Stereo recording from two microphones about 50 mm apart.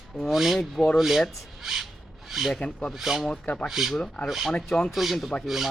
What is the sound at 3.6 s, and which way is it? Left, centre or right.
Speech, centre.